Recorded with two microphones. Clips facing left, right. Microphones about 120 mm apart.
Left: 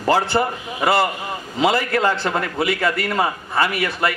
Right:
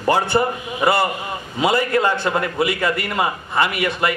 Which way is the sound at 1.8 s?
20° right (ahead or behind).